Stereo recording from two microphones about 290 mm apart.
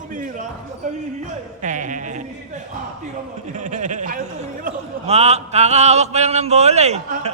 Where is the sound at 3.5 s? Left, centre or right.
Right.